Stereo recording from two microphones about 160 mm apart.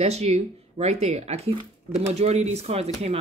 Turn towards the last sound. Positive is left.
turn(degrees=-40)  # may be behind; listen again after turning